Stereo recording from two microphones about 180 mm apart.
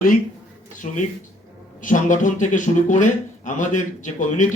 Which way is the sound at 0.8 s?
40° left (ahead or behind).